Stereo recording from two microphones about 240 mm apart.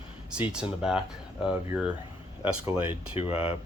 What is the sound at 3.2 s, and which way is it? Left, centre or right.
Speech, left.